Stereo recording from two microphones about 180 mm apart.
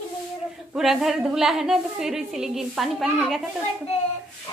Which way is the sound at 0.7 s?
Centre (ahead or behind).